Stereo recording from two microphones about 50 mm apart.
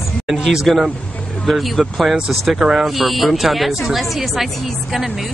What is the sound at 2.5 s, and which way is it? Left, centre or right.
Speech, centre.